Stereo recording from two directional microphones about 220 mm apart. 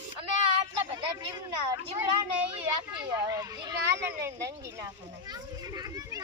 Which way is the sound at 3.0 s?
15° right (ahead or behind).